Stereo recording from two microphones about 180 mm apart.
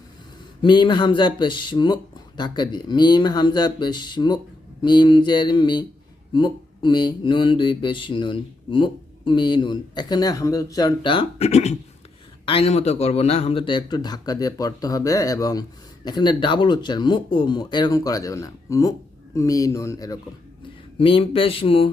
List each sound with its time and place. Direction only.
0.6 s speech: 25° left (ahead or behind)
21.0 s speech: 30° left (ahead or behind)